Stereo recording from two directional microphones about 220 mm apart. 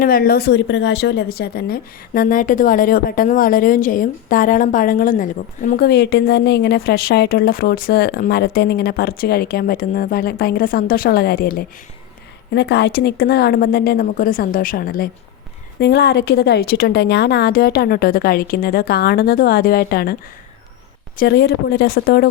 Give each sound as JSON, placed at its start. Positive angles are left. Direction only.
{"t": 0.0, "sound": "speech", "side_deg": 40}
{"t": 21.2, "sound": "speech", "side_deg": 50}